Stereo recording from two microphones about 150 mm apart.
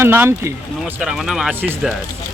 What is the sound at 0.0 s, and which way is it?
Speech, 15° right (ahead or behind).